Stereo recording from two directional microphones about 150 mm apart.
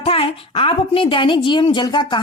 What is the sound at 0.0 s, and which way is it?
A woman's voice, 40° left (ahead or behind).